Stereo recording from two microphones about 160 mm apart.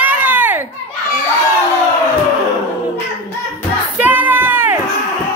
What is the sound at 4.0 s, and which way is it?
Music, 10° right (ahead or behind).